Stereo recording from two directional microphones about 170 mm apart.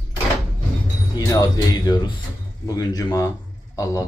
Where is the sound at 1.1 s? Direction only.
20° left (ahead or behind).